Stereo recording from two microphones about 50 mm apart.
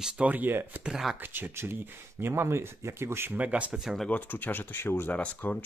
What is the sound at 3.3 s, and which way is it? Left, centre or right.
Speech, right.